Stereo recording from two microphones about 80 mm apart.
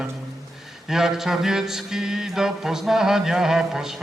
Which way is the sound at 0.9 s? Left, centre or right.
Centre.